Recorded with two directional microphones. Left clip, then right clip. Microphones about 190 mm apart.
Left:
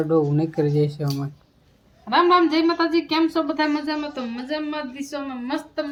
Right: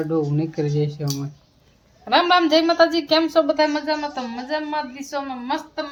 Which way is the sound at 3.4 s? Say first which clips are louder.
Right 4 dB; 30° right (ahead or behind).